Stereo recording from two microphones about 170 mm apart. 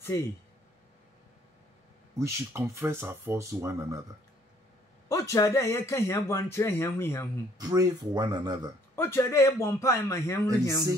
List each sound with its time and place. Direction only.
2.1 s speech: 15° right (ahead or behind)
5.0 s speech: 15° left (ahead or behind)
7.5 s speech: 20° right (ahead or behind)
8.9 s speech: 15° left (ahead or behind)